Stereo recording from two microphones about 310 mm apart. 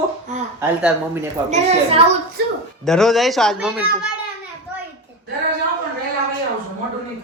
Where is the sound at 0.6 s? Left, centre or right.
Centre.